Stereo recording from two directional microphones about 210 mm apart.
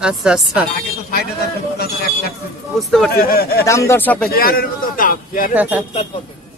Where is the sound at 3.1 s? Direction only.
45° left (ahead or behind).